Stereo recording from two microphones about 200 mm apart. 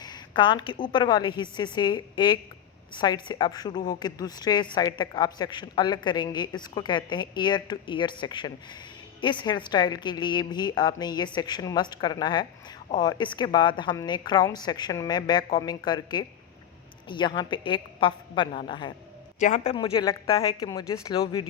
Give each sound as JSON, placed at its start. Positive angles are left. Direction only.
{"t": 0.0, "sound": "a woman's voice", "side_deg": 20}
{"t": 19.4, "sound": "speech", "side_deg": 35}
{"t": 19.7, "sound": "a woman's voice", "side_deg": 20}